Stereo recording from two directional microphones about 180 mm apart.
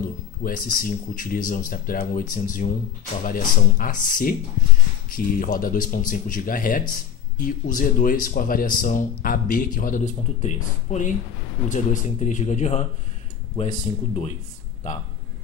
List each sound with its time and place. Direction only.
0.4 s speech: 50° left (ahead or behind)